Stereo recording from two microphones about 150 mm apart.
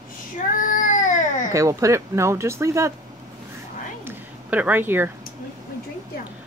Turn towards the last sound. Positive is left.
turn(degrees=-15)  # may be behind; listen again after turning